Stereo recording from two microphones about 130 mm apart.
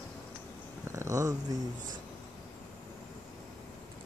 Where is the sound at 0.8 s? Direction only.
25° right (ahead or behind).